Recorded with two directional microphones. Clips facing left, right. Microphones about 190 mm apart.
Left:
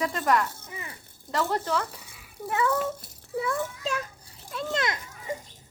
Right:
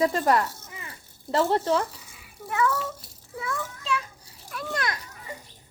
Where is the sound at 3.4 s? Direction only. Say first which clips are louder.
Left 1 dB; 40° left (ahead or behind).